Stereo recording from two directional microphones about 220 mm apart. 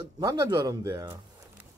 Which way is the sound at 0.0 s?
20° right (ahead or behind).